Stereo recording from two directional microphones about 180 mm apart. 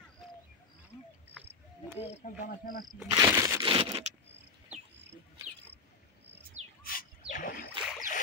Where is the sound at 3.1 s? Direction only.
15° right (ahead or behind).